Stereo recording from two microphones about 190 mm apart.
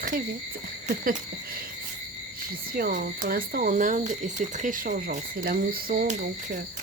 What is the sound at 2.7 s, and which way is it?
Speech, 50° right (ahead or behind).